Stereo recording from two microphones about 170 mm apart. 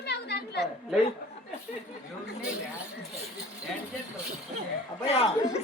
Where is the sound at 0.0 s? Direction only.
75° left (ahead or behind).